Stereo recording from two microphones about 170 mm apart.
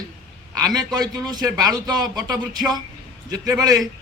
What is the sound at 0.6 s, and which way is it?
A man's voice, 20° right (ahead or behind).